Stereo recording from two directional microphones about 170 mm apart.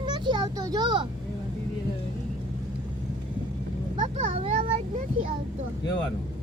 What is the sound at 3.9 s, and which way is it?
Vehicle, 30° right (ahead or behind).